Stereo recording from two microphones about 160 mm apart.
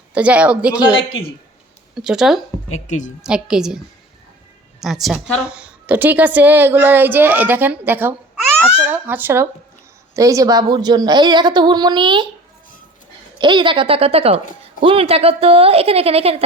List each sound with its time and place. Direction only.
0.1 s a woman's voice: 10° right (ahead or behind)
2.0 s a woman's voice: 5° right (ahead or behind)
2.7 s a woman's voice: 50° left (ahead or behind)
3.2 s a woman's voice: 5° right (ahead or behind)
4.8 s a woman's voice: centre (ahead or behind); by 12.3 s 30° right (ahead or behind)
13.4 s a woman's voice: 30° right (ahead or behind)